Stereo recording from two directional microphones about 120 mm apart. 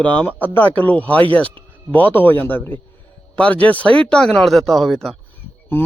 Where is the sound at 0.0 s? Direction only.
10° left (ahead or behind).